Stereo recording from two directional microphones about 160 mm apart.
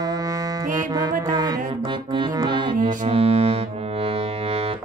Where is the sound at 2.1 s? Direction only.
30° right (ahead or behind).